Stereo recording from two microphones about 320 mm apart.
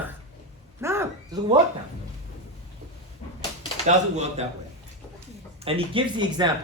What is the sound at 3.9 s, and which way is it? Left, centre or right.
Speech, right.